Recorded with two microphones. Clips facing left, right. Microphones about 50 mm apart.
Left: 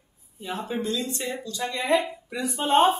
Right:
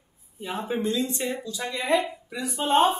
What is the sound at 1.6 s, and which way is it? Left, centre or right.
Speech, centre.